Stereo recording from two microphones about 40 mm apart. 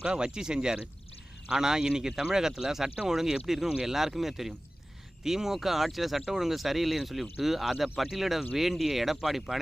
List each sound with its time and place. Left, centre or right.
0.0 s speech: right; by 9.6 s centre